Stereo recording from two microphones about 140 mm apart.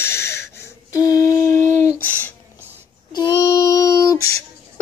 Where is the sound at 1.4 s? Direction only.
70° right (ahead or behind).